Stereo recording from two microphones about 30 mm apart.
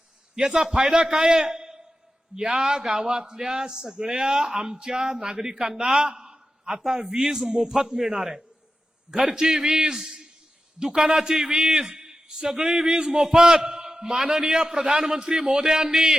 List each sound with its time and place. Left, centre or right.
0.3 s speech: centre
1.4 s a sound: right
2.5 s a man's voice: right
11.9 s a sound: right
13.1 s a man's voice: centre
13.3 s a man's voice: right